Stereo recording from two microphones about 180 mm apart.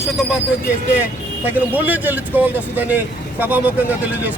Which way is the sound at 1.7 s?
10° right (ahead or behind).